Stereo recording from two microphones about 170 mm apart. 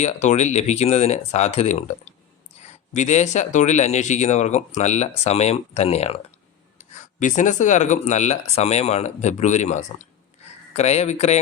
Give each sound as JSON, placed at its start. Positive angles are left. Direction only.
{"t": 0.0, "sound": "speech", "side_deg": 40}
{"t": 2.9, "sound": "speech", "side_deg": 45}